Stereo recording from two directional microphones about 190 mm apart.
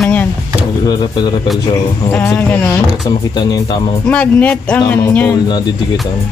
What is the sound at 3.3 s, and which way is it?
Speech, 20° left (ahead or behind).